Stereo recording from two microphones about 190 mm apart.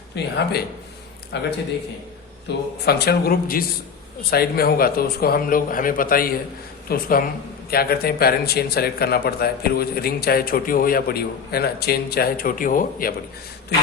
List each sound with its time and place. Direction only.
0.1 s speech: 60° left (ahead or behind)
1.3 s speech: 60° left (ahead or behind)
2.5 s speech: 65° left (ahead or behind); by 13.1 s 50° left (ahead or behind)